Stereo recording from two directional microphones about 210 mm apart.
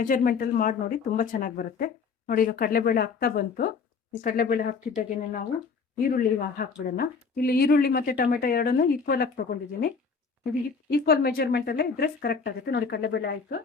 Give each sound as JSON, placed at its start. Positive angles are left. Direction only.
{"t": 0.0, "sound": "speech", "side_deg": 40}
{"t": 10.8, "sound": "speech", "side_deg": 50}